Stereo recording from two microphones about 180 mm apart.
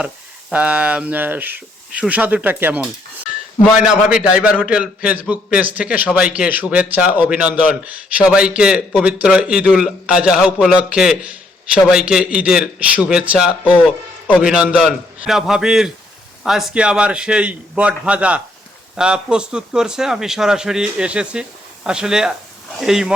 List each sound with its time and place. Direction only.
0.5 s speech: 5° right (ahead or behind)
4.2 s a man's voice: 5° right (ahead or behind)